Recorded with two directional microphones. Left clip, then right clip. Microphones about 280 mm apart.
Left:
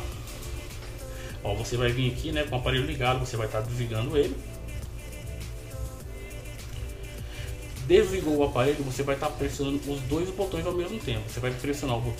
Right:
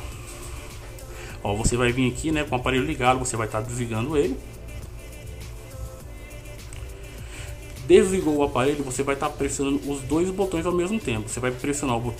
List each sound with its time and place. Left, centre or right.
1.4 s a man's voice: right
7.9 s a man's voice: centre
10.1 s music: centre
10.5 s a man's voice: right